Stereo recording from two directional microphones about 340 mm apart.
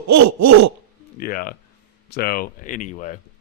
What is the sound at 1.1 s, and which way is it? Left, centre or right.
Speech, left.